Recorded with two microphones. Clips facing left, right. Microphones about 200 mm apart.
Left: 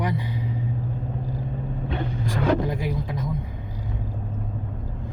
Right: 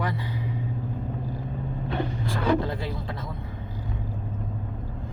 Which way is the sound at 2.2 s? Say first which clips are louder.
Left 2 dB; 15° left (ahead or behind).